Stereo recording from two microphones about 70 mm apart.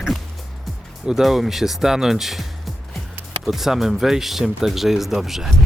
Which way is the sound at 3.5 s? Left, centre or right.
Centre.